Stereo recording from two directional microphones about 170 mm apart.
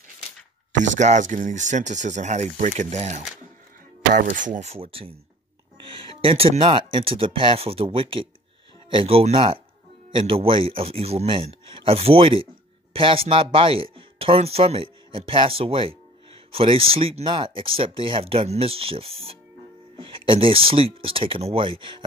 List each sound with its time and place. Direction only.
0.8 s speech: 45° right (ahead or behind)
6.2 s speech: 35° right (ahead or behind)